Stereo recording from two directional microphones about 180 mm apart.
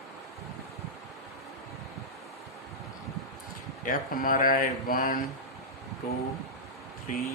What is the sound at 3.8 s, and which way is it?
Speech, 50° left (ahead or behind).